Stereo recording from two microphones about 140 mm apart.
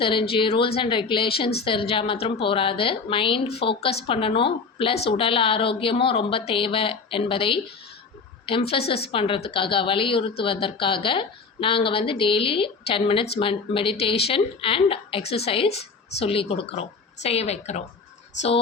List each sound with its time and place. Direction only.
0.0 s a woman's voice: 40° left (ahead or behind)